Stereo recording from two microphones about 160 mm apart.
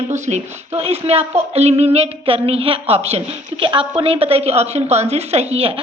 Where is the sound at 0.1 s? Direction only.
45° right (ahead or behind).